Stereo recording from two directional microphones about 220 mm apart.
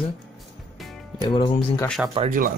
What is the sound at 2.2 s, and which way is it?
Speech, 40° right (ahead or behind).